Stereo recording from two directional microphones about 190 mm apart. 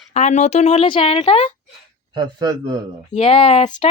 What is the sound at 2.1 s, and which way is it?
Speech, 20° right (ahead or behind).